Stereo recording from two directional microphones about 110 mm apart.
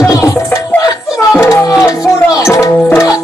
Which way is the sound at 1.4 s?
30° left (ahead or behind).